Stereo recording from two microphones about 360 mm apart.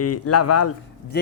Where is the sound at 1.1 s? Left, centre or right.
Left.